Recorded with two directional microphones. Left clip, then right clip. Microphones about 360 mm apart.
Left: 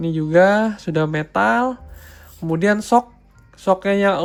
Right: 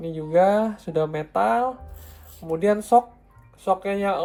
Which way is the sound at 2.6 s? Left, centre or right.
Left.